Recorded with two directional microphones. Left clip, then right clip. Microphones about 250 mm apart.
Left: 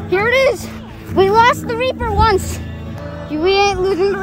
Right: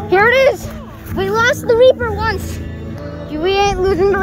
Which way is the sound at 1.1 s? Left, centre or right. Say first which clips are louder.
Left 4 dB; centre.